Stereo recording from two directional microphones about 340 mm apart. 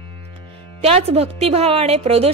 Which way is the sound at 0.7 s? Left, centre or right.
Centre.